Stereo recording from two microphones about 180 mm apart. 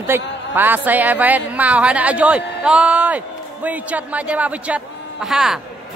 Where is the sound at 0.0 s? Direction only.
10° right (ahead or behind).